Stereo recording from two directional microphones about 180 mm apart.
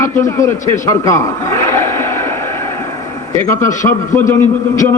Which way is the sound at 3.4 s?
15° left (ahead or behind).